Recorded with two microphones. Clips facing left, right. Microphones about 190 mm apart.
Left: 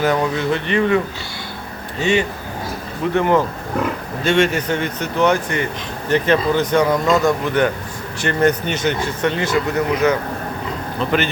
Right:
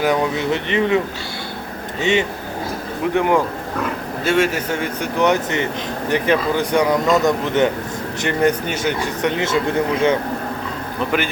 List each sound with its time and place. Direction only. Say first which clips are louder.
0.0 s speech: even; 15° right (ahead or behind)